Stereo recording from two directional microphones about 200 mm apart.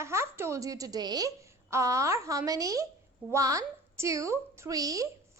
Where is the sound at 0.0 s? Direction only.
15° right (ahead or behind).